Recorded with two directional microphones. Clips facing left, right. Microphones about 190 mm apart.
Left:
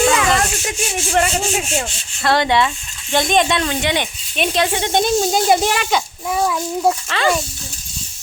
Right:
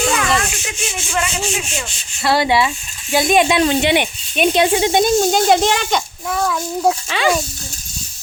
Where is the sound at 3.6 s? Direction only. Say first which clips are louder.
Right 5 dB; 20° right (ahead or behind).